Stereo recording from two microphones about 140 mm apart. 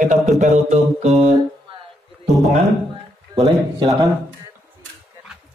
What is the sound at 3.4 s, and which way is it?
Speech, 30° right (ahead or behind).